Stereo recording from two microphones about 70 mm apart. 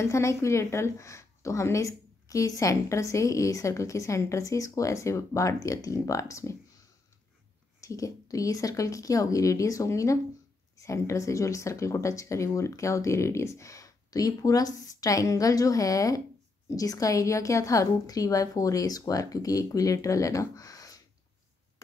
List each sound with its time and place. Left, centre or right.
0.0 s a woman's voice: left
7.8 s a woman's voice: left